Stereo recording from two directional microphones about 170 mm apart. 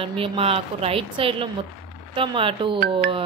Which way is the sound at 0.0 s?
35° right (ahead or behind).